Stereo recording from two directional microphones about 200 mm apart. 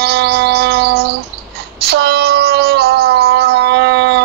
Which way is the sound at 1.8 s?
55° right (ahead or behind).